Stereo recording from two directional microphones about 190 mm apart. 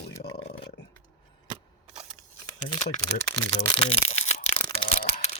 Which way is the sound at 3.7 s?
30° left (ahead or behind).